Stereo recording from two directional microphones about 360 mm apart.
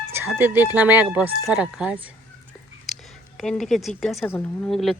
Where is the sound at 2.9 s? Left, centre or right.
Centre.